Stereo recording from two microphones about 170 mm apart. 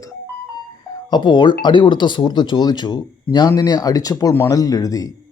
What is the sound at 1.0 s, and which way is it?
Speech, 25° left (ahead or behind).